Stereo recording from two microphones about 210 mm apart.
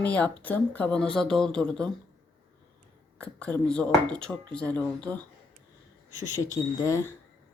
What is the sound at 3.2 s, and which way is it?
Speech, 5° left (ahead or behind).